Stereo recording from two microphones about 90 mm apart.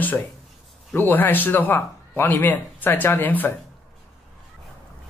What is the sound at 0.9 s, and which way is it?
A man's voice, 20° left (ahead or behind).